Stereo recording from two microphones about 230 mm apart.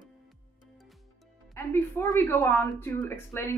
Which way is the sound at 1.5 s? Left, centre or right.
Centre.